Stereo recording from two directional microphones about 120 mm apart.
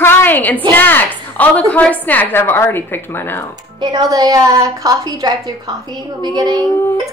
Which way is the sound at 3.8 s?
35° right (ahead or behind).